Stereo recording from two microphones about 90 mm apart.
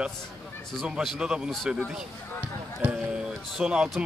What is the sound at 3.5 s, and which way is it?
Speech, 5° right (ahead or behind).